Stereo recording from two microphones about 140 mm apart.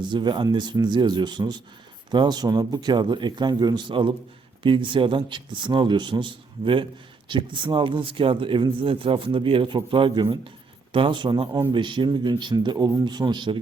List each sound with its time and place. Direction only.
0.0 s speech: 35° right (ahead or behind)